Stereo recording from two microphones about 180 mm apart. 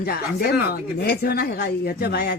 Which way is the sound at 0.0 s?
60° left (ahead or behind).